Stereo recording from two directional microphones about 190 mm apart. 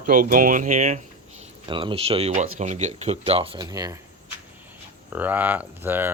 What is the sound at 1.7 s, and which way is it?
Speech, 25° right (ahead or behind).